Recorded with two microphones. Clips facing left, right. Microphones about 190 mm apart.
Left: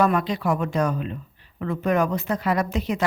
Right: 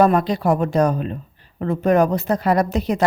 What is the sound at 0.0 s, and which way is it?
Speech, 35° right (ahead or behind).